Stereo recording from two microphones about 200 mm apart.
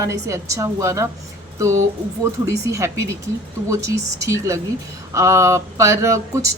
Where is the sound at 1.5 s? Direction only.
15° right (ahead or behind).